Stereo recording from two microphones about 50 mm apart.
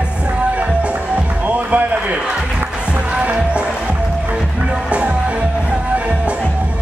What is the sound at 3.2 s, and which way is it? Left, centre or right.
Music, right.